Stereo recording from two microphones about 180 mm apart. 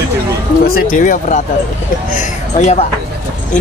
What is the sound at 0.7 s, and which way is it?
Speech, 50° left (ahead or behind).